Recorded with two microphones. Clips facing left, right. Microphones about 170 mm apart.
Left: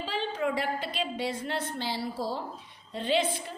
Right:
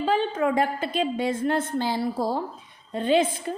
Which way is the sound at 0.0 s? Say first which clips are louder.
Right 7 dB; 50° right (ahead or behind).